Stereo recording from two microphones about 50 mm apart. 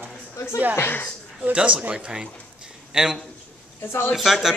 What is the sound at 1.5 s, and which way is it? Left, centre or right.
A man's voice, right.